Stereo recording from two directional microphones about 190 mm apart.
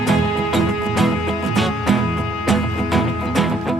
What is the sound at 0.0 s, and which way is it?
Music, centre (ahead or behind).